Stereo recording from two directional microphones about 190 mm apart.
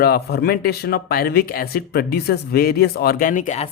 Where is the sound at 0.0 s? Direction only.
55° left (ahead or behind).